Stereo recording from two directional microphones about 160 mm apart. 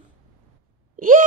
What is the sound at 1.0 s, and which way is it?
Wail, 60° right (ahead or behind).